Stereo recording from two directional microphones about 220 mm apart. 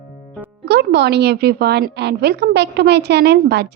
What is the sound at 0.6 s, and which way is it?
Speech, 50° right (ahead or behind).